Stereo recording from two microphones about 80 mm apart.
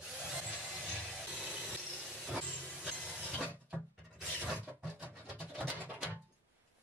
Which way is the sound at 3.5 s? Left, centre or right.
Centre.